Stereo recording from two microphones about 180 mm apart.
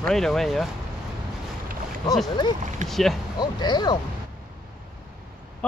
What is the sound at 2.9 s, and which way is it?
Speech, centre (ahead or behind).